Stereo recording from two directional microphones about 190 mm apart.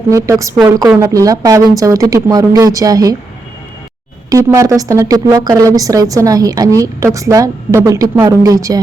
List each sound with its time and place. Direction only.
0.1 s a woman's voice: 15° right (ahead or behind)
4.3 s a woman's voice: 15° right (ahead or behind)